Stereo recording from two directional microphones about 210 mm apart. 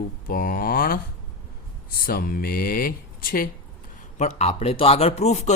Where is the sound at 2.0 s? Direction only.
45° left (ahead or behind).